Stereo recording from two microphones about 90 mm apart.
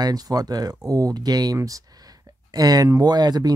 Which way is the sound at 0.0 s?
45° right (ahead or behind).